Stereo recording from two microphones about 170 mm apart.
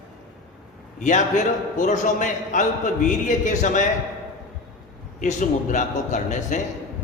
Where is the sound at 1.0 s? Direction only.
45° left (ahead or behind).